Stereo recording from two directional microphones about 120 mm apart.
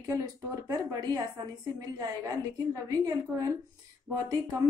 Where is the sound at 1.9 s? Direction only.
30° right (ahead or behind).